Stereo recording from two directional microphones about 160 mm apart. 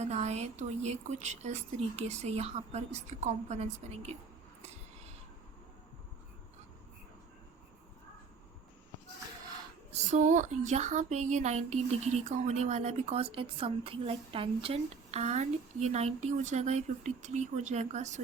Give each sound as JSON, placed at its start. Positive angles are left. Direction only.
{"t": 0.0, "sound": "speech", "side_deg": -45}
{"t": 9.9, "sound": "speech", "side_deg": -50}